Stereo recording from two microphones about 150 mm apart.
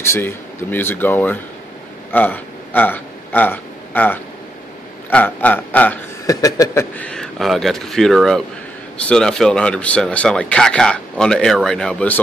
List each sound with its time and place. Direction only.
0.0 s speech: 15° left (ahead or behind)
2.0 s a sound: 10° left (ahead or behind)
5.1 s speech: 10° left (ahead or behind)
6.2 s speech: 25° left (ahead or behind)
7.1 s speech: centre (ahead or behind)